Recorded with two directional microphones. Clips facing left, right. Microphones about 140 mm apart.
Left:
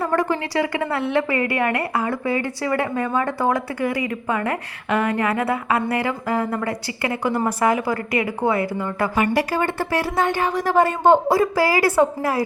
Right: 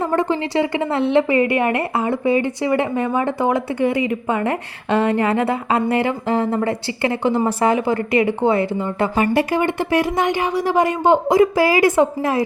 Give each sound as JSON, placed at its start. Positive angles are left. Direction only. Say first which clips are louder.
{"t": 0.0, "sound": "a woman's voice", "louder": "right 2 dB", "side_deg": -20}